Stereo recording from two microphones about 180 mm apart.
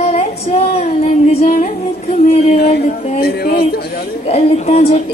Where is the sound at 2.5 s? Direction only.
60° left (ahead or behind).